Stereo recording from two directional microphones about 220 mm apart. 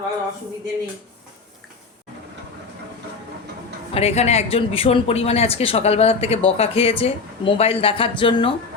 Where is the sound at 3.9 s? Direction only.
25° left (ahead or behind).